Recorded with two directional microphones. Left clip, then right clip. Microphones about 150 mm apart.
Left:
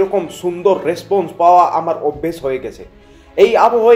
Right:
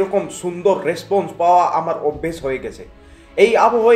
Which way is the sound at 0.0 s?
30° left (ahead or behind).